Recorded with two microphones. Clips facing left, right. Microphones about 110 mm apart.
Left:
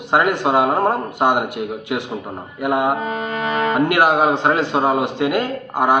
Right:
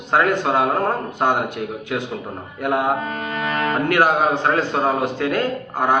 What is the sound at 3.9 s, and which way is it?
Speech, 15° left (ahead or behind).